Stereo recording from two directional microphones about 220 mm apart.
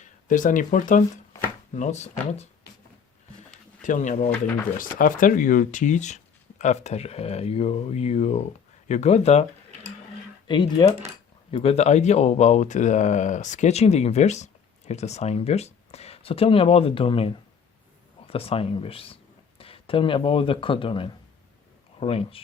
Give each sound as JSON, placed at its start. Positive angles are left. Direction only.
{"t": 0.0, "sound": "speech", "side_deg": 35}
{"t": 3.8, "sound": "speech", "side_deg": 35}
{"t": 10.4, "sound": "speech", "side_deg": 20}